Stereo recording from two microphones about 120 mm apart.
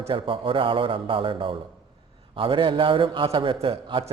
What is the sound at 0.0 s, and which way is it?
A man's voice, 45° right (ahead or behind).